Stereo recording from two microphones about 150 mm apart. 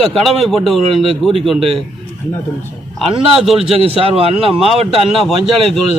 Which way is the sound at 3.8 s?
40° right (ahead or behind).